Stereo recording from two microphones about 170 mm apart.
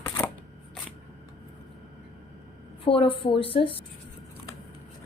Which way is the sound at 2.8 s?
30° left (ahead or behind).